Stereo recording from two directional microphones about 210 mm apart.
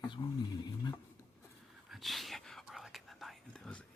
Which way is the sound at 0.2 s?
25° left (ahead or behind).